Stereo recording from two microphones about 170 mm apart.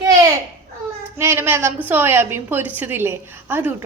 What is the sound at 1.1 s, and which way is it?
A woman's voice, 15° right (ahead or behind).